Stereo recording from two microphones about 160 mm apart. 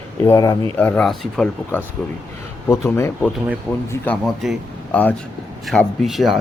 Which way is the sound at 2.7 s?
15° left (ahead or behind).